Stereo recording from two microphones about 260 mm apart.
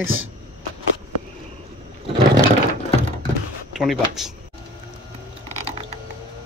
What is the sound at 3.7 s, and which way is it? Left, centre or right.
Speech, centre.